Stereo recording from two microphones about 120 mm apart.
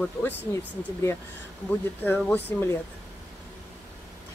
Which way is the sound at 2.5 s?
15° left (ahead or behind).